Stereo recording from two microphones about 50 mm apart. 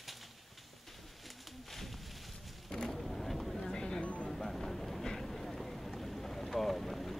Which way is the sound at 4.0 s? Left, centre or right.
Left.